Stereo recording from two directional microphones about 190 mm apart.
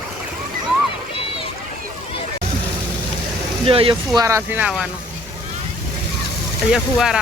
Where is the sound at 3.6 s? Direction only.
30° right (ahead or behind).